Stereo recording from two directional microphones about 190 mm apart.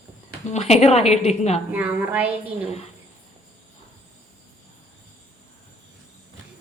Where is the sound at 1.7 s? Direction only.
10° right (ahead or behind).